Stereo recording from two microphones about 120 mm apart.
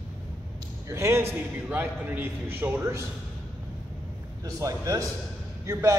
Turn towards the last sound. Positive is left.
turn(degrees=-25)  # may be behind; listen again after turning